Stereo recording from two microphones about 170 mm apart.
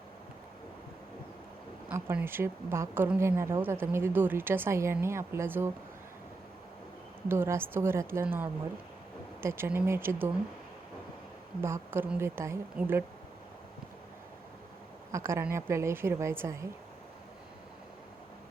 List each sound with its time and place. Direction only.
1.9 s a woman's voice: 10° right (ahead or behind)
7.3 s a woman's voice: 15° right (ahead or behind)
11.6 s a woman's voice: 15° right (ahead or behind)
15.1 s a woman's voice: 15° right (ahead or behind)